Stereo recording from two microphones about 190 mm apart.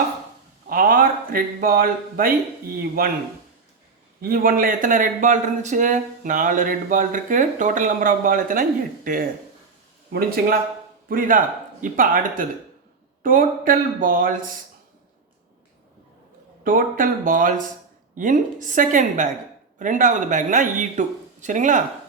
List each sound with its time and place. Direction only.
0.7 s speech: 50° right (ahead or behind)
4.2 s speech: 50° right (ahead or behind)
16.6 s speech: 45° right (ahead or behind)